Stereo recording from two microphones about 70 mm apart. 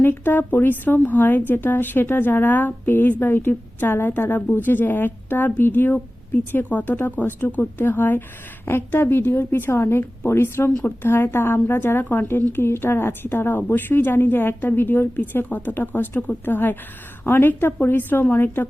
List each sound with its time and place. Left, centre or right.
0.0 s a woman's voice: left